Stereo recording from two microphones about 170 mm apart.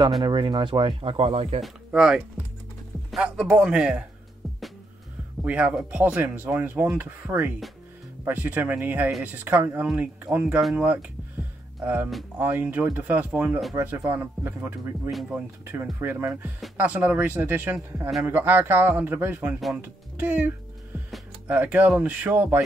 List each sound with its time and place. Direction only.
0.2 s speech: 25° right (ahead or behind)
1.6 s a man's voice: 5° right (ahead or behind)
5.4 s speech: 10° right (ahead or behind)
15.0 s speech: 5° right (ahead or behind)